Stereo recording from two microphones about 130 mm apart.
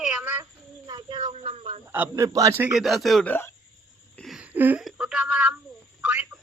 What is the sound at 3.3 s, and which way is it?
Speech, 15° left (ahead or behind).